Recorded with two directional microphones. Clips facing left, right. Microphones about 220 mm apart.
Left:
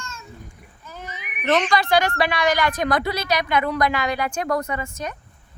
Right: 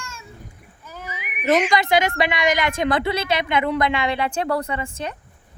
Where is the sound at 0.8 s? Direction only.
10° right (ahead or behind).